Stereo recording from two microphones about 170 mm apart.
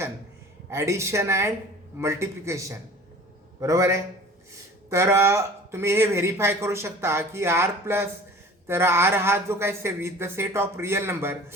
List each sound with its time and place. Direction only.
0.7 s a man's voice: 15° right (ahead or behind)